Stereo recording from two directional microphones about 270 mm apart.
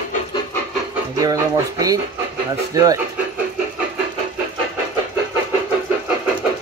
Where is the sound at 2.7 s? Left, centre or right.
Centre.